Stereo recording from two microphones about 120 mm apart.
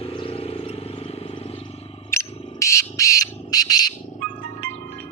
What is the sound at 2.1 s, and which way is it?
Bird, 25° left (ahead or behind).